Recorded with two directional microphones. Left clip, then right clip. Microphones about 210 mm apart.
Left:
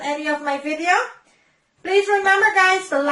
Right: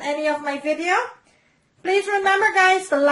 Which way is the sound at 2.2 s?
45° right (ahead or behind).